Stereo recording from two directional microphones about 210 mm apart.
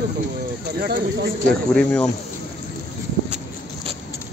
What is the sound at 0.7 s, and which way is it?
Speech, 45° right (ahead or behind).